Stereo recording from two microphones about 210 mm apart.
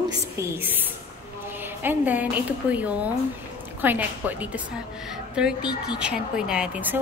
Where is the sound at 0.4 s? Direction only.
10° right (ahead or behind).